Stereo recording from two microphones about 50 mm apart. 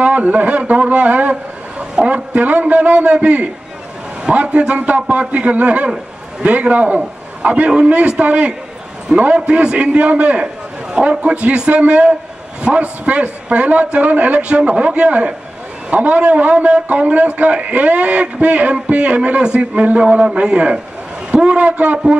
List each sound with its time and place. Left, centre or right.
0.0 s a man's voice: right
2.0 s speech: centre
2.3 s a man's voice: right
10.4 s a sound: centre
11.1 s a man's voice: right
14.6 s a man's voice: right